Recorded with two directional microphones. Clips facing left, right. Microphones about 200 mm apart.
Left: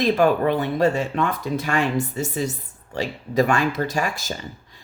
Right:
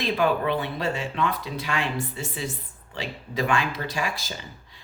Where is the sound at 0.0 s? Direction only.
45° left (ahead or behind).